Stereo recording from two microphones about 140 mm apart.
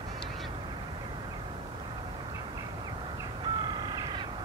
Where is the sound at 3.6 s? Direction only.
30° right (ahead or behind).